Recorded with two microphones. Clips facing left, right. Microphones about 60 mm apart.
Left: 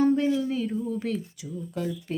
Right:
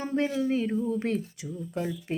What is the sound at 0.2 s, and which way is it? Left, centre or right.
Speech, right.